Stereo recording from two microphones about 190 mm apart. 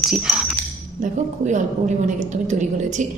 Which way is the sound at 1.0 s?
40° right (ahead or behind).